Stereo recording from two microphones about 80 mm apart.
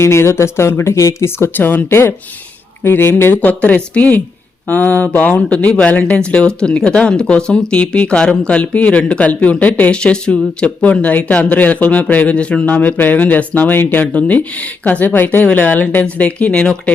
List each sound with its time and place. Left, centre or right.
0.0 s speech: left
3.6 s speech: centre